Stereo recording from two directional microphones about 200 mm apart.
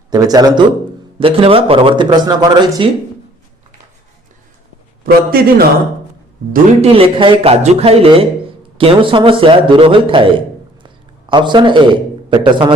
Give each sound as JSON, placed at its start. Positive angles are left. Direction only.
{"t": 0.1, "sound": "speech", "side_deg": -20}
{"t": 5.0, "sound": "a man's voice", "side_deg": -50}
{"t": 6.8, "sound": "speech", "side_deg": -30}
{"t": 10.8, "sound": "a sound", "side_deg": -25}
{"t": 12.3, "sound": "speech", "side_deg": -25}